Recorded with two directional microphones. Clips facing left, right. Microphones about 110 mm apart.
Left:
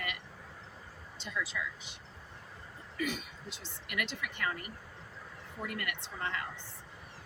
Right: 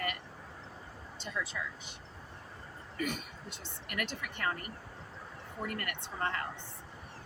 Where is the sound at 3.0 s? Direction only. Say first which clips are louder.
Even; 50° right (ahead or behind).